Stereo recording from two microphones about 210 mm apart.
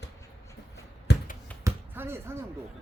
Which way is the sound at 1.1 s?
50° left (ahead or behind).